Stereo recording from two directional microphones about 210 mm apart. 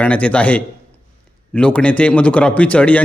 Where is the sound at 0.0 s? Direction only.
5° left (ahead or behind).